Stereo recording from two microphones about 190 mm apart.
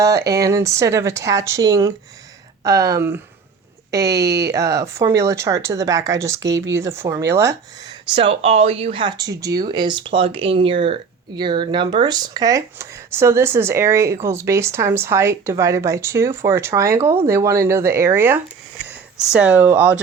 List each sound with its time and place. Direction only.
0.0 s speech: 15° right (ahead or behind)
4.0 s speech: 60° right (ahead or behind)
4.5 s speech: 15° right (ahead or behind)
6.4 s speech: 70° right (ahead or behind)
6.7 s speech: 15° right (ahead or behind)
8.1 s speech: 30° right (ahead or behind); by 19.9 s 10° right (ahead or behind)